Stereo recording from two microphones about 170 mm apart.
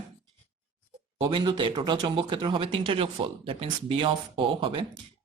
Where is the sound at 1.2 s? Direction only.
25° right (ahead or behind).